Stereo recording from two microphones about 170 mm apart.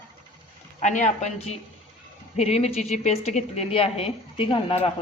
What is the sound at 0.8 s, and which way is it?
A woman's voice, 45° left (ahead or behind).